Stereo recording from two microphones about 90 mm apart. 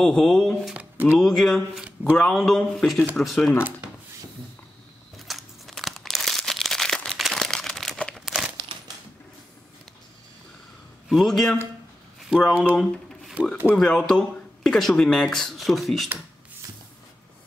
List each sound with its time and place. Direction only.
0.0 s speech: 5° left (ahead or behind)
0.7 s a sound: 20° right (ahead or behind)
1.1 s speech: 5° left (ahead or behind)
1.8 s speech: 15° right (ahead or behind)
2.1 s speech: 5° left (ahead or behind)
5.3 s crumpling: centre (ahead or behind)
8.3 s crumpling: 10° right (ahead or behind)
8.5 s a sound: 50° right (ahead or behind)
11.1 s speech: centre (ahead or behind)
12.2 s a sound: 5° right (ahead or behind)
12.7 s a sound: 5° left (ahead or behind)
13.7 s speech: 5° left (ahead or behind)